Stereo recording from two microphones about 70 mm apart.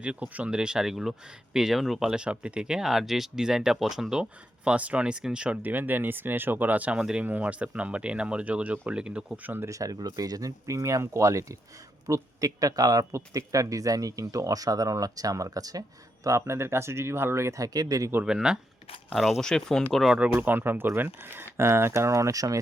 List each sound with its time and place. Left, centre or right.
0.0 s speech: centre
5.7 s speech: right
9.6 s speech: right
16.2 s speech: right
17.7 s speech: right
18.3 s speech: centre
20.3 s speech: right